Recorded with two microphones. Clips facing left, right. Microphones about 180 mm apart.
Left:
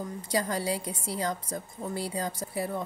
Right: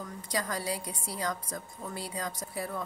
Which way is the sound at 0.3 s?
30° left (ahead or behind).